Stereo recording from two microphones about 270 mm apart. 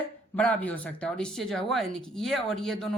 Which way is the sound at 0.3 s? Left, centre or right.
Centre.